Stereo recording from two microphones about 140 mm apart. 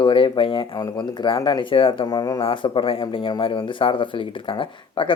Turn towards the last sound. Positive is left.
turn(degrees=40)  # may be behind; listen again after turning